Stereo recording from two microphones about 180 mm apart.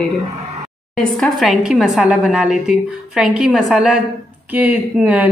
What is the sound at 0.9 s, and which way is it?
A woman's voice, centre (ahead or behind).